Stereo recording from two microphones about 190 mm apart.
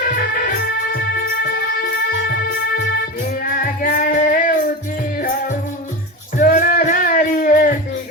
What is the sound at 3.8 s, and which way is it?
Music, 45° left (ahead or behind).